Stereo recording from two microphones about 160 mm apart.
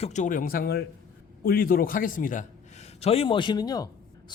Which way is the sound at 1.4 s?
65° left (ahead or behind).